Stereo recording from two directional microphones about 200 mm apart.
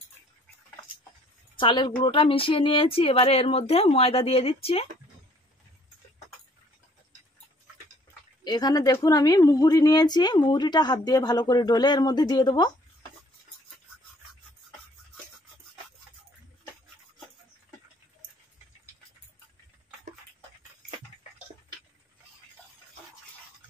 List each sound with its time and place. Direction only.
1.6 s a woman's voice: 25° left (ahead or behind)
8.5 s a woman's voice: 20° left (ahead or behind)